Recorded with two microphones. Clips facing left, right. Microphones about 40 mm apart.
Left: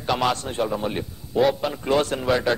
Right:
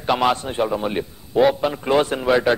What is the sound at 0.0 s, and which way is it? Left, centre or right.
A man's voice, centre.